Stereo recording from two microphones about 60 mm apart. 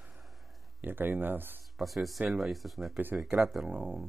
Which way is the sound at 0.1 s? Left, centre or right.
Centre.